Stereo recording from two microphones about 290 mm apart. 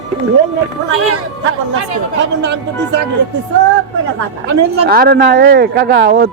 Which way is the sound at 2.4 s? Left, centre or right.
Right.